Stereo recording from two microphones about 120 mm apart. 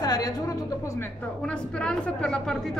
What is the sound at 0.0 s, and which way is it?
Music, 35° left (ahead or behind).